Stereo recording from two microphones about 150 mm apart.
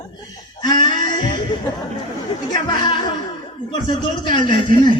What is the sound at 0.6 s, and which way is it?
Music, 30° left (ahead or behind).